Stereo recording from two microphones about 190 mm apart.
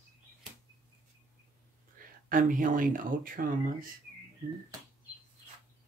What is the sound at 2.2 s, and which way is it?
Speech, 45° right (ahead or behind).